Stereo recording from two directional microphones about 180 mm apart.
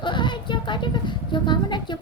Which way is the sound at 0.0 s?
25° left (ahead or behind).